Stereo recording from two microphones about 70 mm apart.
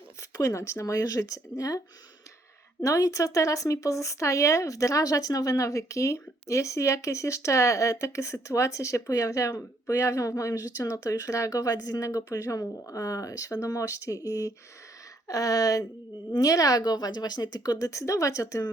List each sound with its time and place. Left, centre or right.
0.2 s speech: left
2.8 s a woman's voice: left